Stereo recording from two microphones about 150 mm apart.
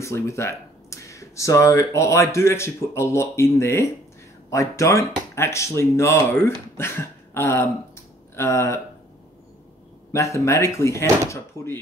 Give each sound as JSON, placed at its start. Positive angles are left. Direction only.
{"t": 0.0, "sound": "speech", "side_deg": 20}
{"t": 10.1, "sound": "speech", "side_deg": 20}